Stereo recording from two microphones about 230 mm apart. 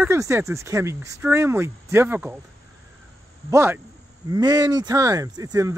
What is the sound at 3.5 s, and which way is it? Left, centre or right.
Speech, centre.